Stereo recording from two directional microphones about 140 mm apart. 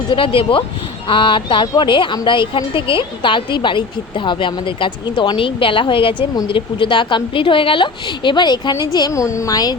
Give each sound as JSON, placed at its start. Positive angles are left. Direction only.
{"t": 0.1, "sound": "a woman's voice", "side_deg": 40}